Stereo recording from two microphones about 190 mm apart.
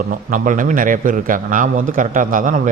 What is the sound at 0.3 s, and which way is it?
A man's voice, 45° right (ahead or behind).